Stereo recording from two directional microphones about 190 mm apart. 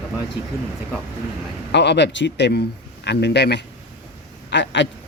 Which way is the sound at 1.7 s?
65° left (ahead or behind).